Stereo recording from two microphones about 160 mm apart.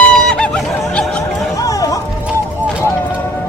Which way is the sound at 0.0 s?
5° left (ahead or behind).